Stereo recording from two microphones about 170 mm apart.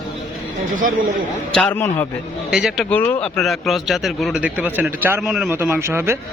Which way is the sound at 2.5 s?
5° right (ahead or behind).